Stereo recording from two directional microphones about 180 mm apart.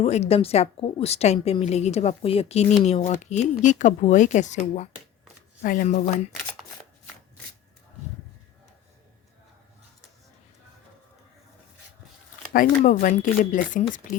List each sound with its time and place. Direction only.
0.0 s a woman's voice: 35° left (ahead or behind)
12.5 s speech: 50° left (ahead or behind)